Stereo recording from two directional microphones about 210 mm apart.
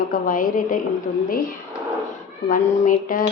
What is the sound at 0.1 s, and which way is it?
Speech, 40° left (ahead or behind).